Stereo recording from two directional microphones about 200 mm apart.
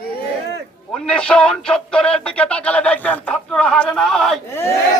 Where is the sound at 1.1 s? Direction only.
5° left (ahead or behind).